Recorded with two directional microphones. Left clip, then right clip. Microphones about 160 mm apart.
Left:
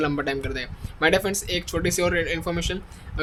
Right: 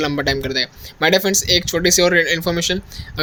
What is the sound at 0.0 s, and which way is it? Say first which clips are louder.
Speech: right 6 dB; 35° right (ahead or behind).